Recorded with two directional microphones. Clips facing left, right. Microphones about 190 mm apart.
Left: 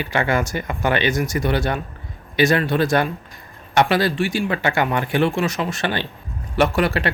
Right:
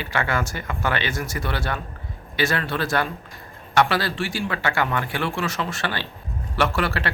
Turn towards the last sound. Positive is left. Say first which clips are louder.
# left 5 dB
turn(degrees=15)  # may be behind; listen again after turning